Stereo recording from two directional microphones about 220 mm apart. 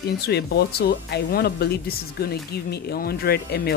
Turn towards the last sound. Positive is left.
turn(degrees=45)  # may be behind; listen again after turning